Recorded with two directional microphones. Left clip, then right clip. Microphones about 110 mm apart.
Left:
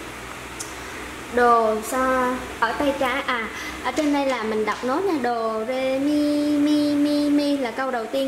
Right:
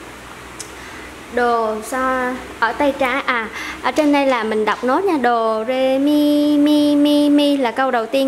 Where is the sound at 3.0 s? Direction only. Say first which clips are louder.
Right 5 dB; 65° right (ahead or behind).